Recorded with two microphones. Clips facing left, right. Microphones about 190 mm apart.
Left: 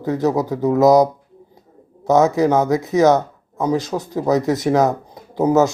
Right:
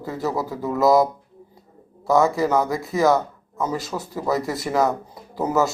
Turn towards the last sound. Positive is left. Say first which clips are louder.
# left 6 dB
turn(degrees=20)  # may be behind; listen again after turning